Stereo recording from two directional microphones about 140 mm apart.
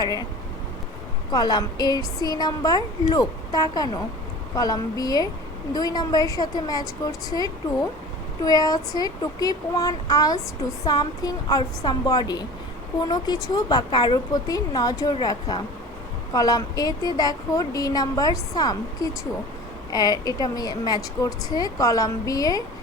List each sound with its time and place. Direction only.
0.0 s a woman's voice: 30° left (ahead or behind)
1.3 s a woman's voice: 30° left (ahead or behind)